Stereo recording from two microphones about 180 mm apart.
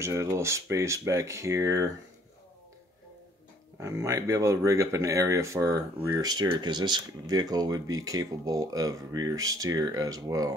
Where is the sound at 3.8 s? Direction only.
15° right (ahead or behind).